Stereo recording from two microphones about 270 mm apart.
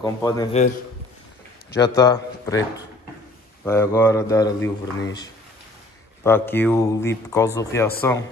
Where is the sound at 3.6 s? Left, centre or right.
Centre.